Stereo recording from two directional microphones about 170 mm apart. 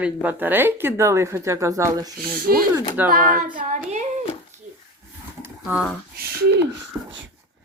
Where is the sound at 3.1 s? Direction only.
55° right (ahead or behind).